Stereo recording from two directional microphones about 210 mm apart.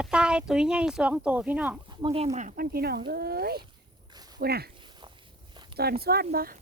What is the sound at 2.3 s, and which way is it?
Speech, 40° right (ahead or behind).